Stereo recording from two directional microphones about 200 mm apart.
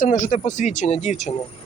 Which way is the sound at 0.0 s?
40° left (ahead or behind).